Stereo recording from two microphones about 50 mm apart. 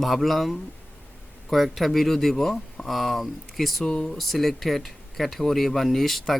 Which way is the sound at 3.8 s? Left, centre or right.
Centre.